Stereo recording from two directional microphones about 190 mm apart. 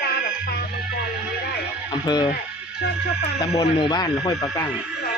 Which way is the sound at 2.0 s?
20° left (ahead or behind).